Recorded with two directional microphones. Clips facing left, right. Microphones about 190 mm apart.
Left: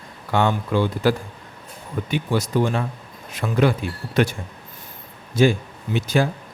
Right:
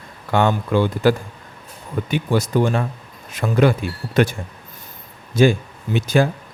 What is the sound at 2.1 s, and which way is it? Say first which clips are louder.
Speech: right 3 dB; 50° right (ahead or behind).